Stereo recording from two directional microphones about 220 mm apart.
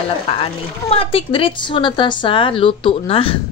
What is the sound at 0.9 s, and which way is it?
A woman's voice, 25° left (ahead or behind).